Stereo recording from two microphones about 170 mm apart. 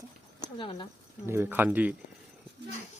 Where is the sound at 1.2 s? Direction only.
15° right (ahead or behind).